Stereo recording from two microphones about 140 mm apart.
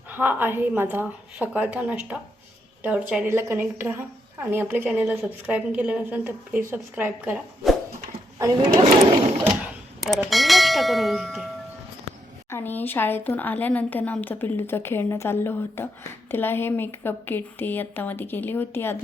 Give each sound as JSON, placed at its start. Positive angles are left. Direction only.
{"t": 0.1, "sound": "a woman's voice", "side_deg": -15}
{"t": 8.4, "sound": "speech", "side_deg": -20}
{"t": 10.2, "sound": "speech", "side_deg": 0}
{"t": 12.5, "sound": "speech", "side_deg": 15}